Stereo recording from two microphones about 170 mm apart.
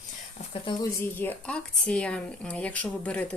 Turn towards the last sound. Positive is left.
turn(degrees=10)  # may be behind; listen again after turning